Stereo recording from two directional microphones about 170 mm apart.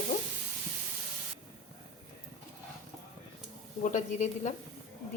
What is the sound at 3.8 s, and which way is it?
Speech, 45° left (ahead or behind).